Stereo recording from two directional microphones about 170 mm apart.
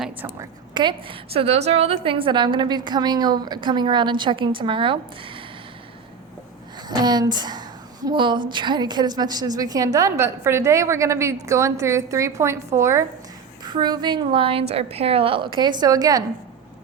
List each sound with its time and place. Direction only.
0.7 s a woman's voice: 25° right (ahead or behind)
6.8 s a woman's voice: 25° right (ahead or behind)